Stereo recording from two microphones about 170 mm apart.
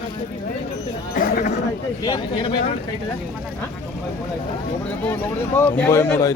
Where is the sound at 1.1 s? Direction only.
60° left (ahead or behind).